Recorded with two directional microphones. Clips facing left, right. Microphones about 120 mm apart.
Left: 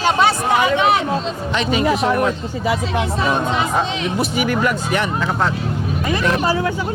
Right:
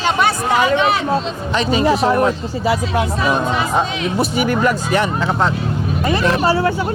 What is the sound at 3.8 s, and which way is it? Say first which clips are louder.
Speech: right 1 dB; 25° left (ahead or behind).